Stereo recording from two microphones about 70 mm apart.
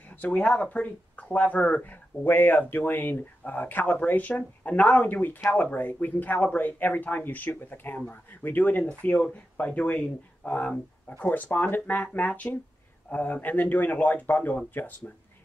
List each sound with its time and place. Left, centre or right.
0.1 s speech: centre